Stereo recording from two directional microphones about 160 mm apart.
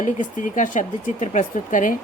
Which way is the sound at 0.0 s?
50° left (ahead or behind).